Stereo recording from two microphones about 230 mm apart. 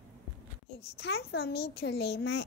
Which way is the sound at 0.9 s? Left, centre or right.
Left.